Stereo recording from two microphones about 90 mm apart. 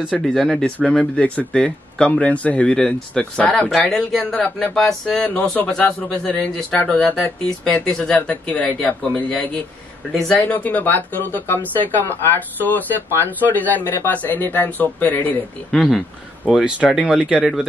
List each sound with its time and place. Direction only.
0.3 s speech: 5° left (ahead or behind)
15.7 s speech: centre (ahead or behind)